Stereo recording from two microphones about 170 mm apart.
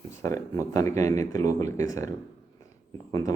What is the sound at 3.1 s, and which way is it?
Speech, 20° left (ahead or behind).